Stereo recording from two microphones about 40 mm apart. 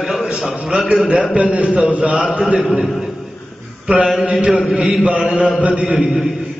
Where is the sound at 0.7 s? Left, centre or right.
Right.